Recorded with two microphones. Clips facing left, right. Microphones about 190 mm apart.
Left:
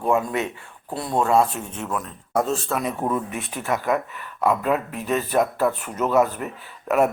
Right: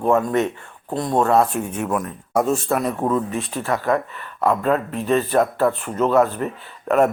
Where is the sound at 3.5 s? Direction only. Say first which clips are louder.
Right 1 dB; 15° left (ahead or behind).